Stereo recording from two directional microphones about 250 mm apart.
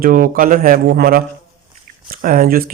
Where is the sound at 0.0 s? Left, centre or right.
Right.